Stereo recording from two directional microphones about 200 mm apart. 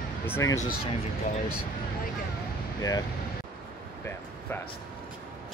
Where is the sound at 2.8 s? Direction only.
15° left (ahead or behind).